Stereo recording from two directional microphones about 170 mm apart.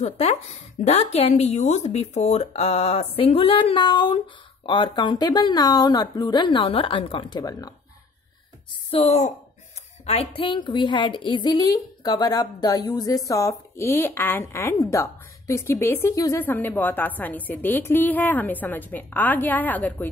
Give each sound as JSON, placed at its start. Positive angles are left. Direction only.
{"t": 0.0, "sound": "a woman's voice", "side_deg": 40}
{"t": 8.9, "sound": "a woman's voice", "side_deg": 40}